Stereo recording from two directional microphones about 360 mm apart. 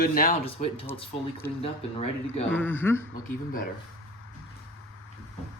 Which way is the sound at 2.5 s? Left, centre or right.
Centre.